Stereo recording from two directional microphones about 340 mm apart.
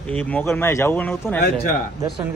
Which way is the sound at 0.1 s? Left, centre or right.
Centre.